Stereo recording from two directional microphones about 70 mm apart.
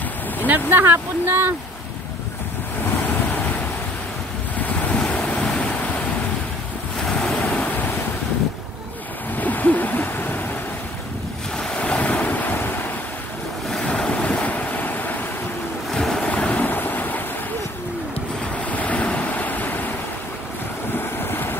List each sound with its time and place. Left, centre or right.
0.5 s speech: right
4.6 s waves: left
7.1 s waves: centre
7.4 s waves: left
9.4 s a sound: left
11.5 s waves: centre
13.7 s waves: centre
15.9 s waves: centre
16.3 s waves: centre
18.7 s waves: left
20.9 s waves: left